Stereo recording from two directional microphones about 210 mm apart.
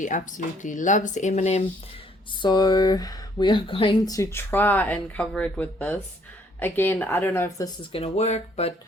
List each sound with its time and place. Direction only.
0.0 s speech: 35° left (ahead or behind)
2.4 s speech: 20° left (ahead or behind)
7.8 s speech: 25° left (ahead or behind)